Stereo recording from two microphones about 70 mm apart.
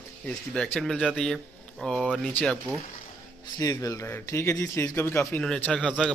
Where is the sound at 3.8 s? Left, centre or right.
Left.